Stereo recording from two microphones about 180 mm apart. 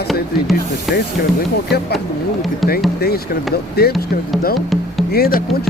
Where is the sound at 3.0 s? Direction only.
60° left (ahead or behind).